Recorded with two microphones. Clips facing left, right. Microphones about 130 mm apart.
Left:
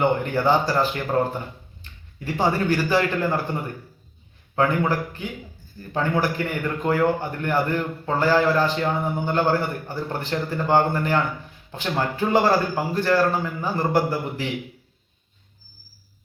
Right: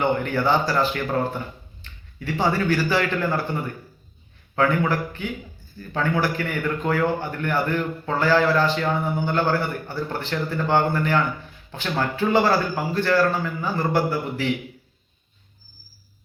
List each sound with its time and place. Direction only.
0.0 s a man's voice: 15° left (ahead or behind)